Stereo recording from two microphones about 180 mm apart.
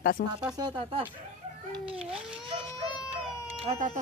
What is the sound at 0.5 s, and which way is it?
Speech, 30° right (ahead or behind).